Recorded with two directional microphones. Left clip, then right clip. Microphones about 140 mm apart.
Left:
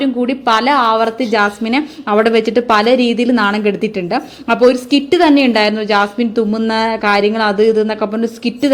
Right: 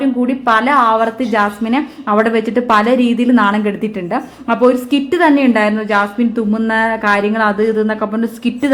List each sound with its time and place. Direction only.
0.0 s a woman's voice: 30° left (ahead or behind); by 8.7 s 10° left (ahead or behind)